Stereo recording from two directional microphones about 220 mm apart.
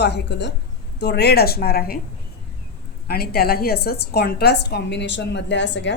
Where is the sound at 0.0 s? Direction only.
50° left (ahead or behind).